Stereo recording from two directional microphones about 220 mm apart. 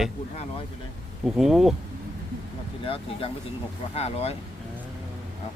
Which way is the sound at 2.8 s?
25° left (ahead or behind).